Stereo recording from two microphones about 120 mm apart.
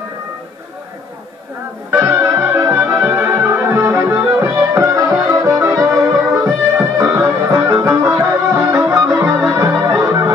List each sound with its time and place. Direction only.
1.9 s music: 20° right (ahead or behind)